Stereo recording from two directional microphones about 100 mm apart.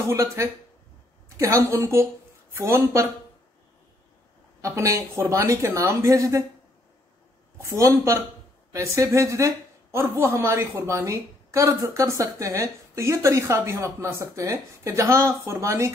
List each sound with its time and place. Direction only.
0.0 s speech: 30° right (ahead or behind)
4.6 s speech: 30° right (ahead or behind)
7.5 s speech: 30° right (ahead or behind)